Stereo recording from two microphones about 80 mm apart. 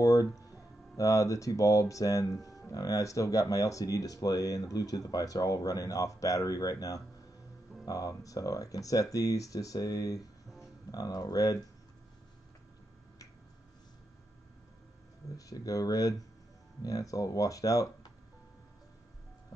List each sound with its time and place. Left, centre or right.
0.0 s speech: left
15.3 s speech: left